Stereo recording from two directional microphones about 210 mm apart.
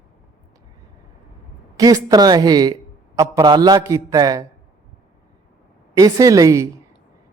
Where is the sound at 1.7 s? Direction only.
15° right (ahead or behind).